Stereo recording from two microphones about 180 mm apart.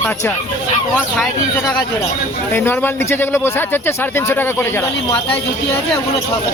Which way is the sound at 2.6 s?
10° left (ahead or behind).